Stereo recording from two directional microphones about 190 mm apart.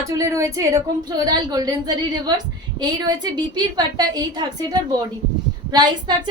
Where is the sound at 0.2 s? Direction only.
15° right (ahead or behind).